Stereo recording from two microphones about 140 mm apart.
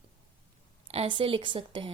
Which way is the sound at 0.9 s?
40° right (ahead or behind).